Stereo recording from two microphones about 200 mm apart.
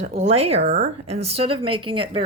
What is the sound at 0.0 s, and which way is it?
Speech, 35° right (ahead or behind).